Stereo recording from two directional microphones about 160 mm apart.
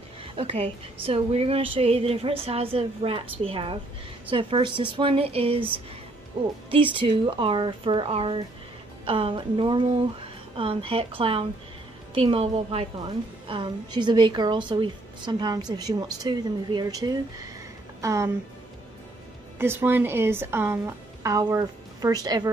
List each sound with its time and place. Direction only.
0.2 s a woman's voice: 35° right (ahead or behind)
6.7 s a woman's voice: 30° right (ahead or behind)
19.6 s a woman's voice: 15° right (ahead or behind)